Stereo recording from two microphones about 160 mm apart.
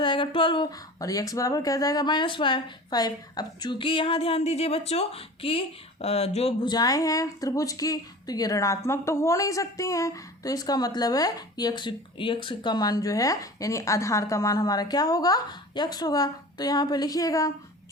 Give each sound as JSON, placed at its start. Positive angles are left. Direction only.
{"t": 0.0, "sound": "speech", "side_deg": 30}